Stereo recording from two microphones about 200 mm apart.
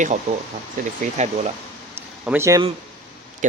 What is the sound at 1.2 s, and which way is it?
Speech, 35° right (ahead or behind).